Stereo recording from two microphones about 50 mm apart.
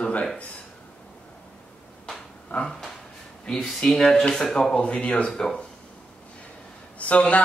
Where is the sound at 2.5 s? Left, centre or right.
Left.